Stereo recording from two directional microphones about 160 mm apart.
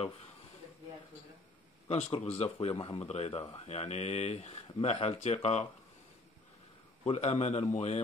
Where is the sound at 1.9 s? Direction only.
40° left (ahead or behind).